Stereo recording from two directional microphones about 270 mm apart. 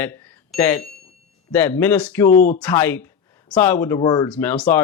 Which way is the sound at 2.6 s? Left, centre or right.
Centre.